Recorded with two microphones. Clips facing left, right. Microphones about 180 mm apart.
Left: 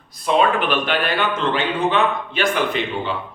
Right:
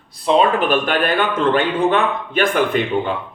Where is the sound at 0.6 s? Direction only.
45° right (ahead or behind).